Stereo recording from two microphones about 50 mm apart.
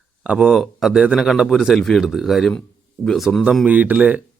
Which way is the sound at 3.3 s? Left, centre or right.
Centre.